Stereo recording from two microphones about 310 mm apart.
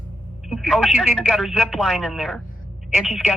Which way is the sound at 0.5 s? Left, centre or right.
Centre.